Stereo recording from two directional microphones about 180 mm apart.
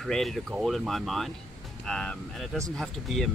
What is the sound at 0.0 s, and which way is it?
Speech, centre (ahead or behind).